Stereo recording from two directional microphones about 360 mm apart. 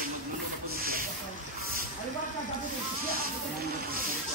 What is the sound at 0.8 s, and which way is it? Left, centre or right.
Snake, right.